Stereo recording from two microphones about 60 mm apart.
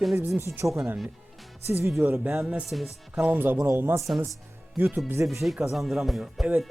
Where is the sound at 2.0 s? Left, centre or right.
Right.